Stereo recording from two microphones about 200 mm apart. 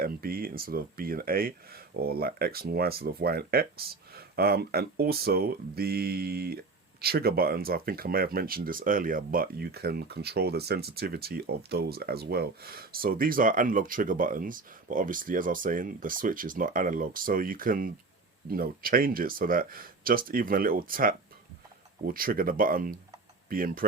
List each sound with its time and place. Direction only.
0.0 s speech: 45° right (ahead or behind)